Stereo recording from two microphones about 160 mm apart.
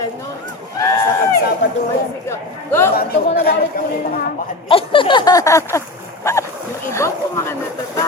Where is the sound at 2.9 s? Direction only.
75° left (ahead or behind).